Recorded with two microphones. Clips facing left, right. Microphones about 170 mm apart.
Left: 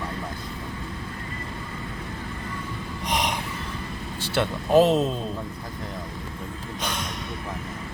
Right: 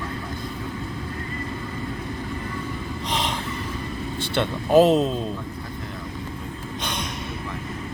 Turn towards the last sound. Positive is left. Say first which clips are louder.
# right 1 dB
turn(degrees=5)  # may be behind; listen again after turning